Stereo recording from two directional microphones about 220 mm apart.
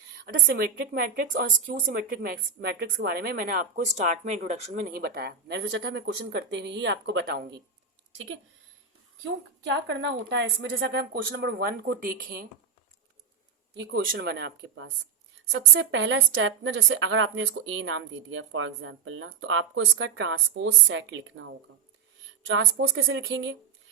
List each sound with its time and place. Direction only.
0.3 s speech: 45° right (ahead or behind)
9.8 s speech: 50° right (ahead or behind)
13.7 s a woman's voice: 50° right (ahead or behind)